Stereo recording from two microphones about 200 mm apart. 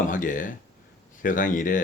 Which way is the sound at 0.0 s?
40° left (ahead or behind).